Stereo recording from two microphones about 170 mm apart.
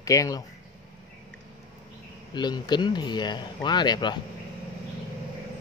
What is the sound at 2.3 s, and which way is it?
Speech, 25° left (ahead or behind).